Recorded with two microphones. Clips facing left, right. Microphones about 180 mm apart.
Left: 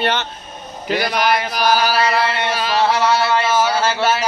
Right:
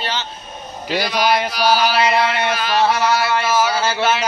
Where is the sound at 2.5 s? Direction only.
30° left (ahead or behind).